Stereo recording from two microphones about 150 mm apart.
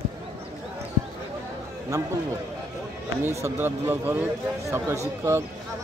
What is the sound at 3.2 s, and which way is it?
Speech, 15° right (ahead or behind).